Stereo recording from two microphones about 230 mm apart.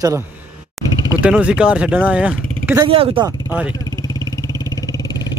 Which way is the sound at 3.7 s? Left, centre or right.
Centre.